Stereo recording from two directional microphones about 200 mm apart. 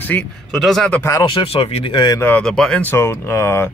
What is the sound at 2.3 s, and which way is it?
Speech, 5° left (ahead or behind).